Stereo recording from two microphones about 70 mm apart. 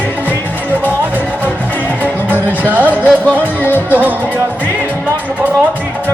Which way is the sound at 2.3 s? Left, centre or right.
Left.